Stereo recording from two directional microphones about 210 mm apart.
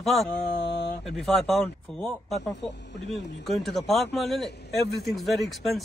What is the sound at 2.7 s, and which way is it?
Speech, 55° left (ahead or behind).